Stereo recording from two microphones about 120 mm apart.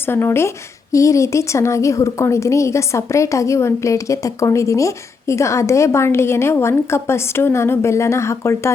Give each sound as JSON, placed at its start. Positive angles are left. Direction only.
{"t": 0.0, "sound": "a woman's voice", "side_deg": 20}